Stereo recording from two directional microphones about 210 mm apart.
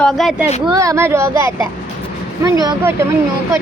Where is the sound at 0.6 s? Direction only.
15° right (ahead or behind).